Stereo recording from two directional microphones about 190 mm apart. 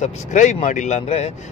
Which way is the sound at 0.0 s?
40° left (ahead or behind).